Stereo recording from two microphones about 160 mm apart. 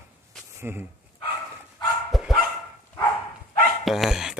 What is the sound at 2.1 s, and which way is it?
Dog, centre (ahead or behind).